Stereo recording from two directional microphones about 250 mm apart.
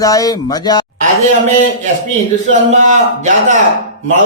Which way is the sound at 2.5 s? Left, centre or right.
Right.